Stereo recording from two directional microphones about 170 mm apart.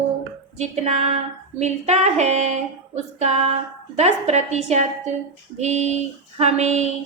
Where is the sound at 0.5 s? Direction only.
40° right (ahead or behind).